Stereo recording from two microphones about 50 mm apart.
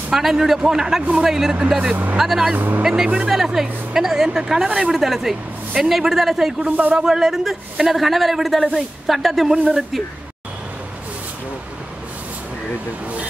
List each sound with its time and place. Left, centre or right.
0.1 s a woman's voice: centre
2.1 s speech: centre
2.5 s speech: right
2.8 s a woman's voice: centre
6.9 s speech: right
7.2 s speech: centre